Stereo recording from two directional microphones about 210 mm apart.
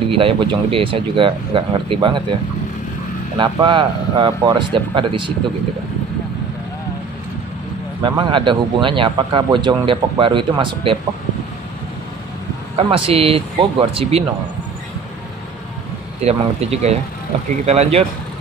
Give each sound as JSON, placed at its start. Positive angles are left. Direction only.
{"t": 0.2, "sound": "a man's voice", "side_deg": -25}
{"t": 3.3, "sound": "a man's voice", "side_deg": -20}
{"t": 8.0, "sound": "a man's voice", "side_deg": -25}
{"t": 12.9, "sound": "a man's voice", "side_deg": -25}
{"t": 16.2, "sound": "speech", "side_deg": -30}